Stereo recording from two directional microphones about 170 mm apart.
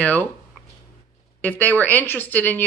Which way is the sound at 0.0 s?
10° left (ahead or behind).